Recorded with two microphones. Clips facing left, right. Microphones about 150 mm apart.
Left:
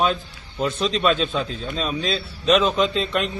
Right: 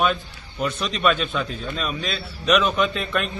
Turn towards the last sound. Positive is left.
turn(degrees=20)  # may be behind; listen again after turning